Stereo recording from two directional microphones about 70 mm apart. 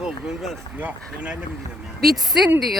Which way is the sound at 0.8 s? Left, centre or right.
Right.